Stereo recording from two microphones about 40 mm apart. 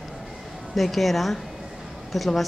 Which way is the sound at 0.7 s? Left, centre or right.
Centre.